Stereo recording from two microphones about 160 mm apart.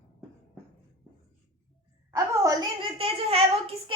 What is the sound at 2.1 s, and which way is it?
A woman's voice, 20° right (ahead or behind).